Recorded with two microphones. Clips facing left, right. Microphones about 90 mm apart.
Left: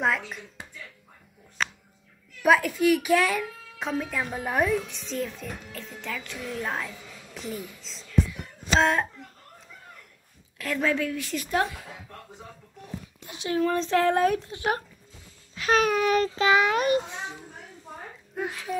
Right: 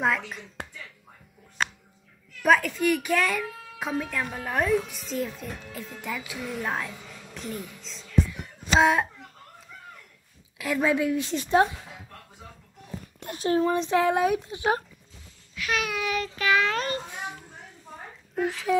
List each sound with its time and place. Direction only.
0.0 s a child's voice: centre (ahead or behind)
0.6 s a sound: 60° right (ahead or behind)
2.4 s a child's voice: 5° left (ahead or behind)
6.3 s a sound: 5° right (ahead or behind)
10.6 s a woman's voice: 10° right (ahead or behind)
13.2 s speech: 45° right (ahead or behind)
13.6 s speech: 15° right (ahead or behind)
15.5 s babbling: 35° left (ahead or behind)
16.3 s a child's voice: 20° left (ahead or behind)
17.2 s a sound: 30° left (ahead or behind)
18.3 s speech: 5° left (ahead or behind)